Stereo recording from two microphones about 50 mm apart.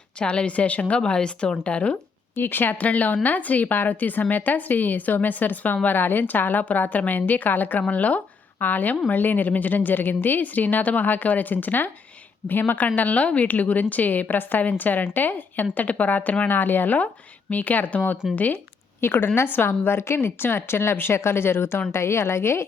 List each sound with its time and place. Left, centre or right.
0.2 s a woman's voice: left
2.3 s a woman's voice: left
18.9 s a woman's voice: left